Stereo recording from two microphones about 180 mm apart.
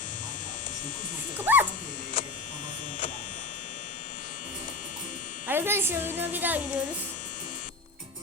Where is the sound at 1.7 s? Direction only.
50° left (ahead or behind).